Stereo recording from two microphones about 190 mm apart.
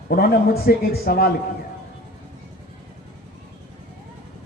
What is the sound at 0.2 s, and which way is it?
A man's voice, 55° left (ahead or behind).